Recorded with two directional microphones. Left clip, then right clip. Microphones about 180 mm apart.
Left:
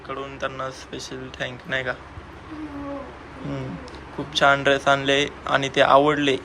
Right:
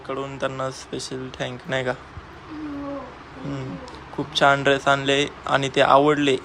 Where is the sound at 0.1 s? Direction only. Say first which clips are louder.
Right 2 dB; 35° right (ahead or behind).